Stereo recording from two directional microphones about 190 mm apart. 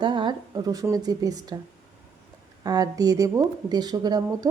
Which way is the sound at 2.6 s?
20° right (ahead or behind).